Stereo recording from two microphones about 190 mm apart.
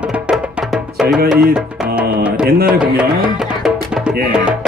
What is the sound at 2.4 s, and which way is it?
Music, 55° right (ahead or behind).